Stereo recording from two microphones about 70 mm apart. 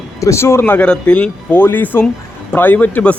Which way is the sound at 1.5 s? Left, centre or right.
Left.